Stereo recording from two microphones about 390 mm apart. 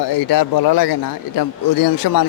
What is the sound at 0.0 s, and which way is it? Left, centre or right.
A man's voice, left.